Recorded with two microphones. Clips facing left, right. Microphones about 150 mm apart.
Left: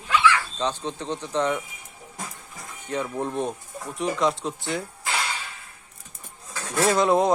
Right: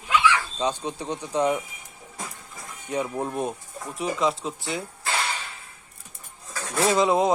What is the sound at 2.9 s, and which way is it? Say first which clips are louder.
Speech: even; 10° right (ahead or behind).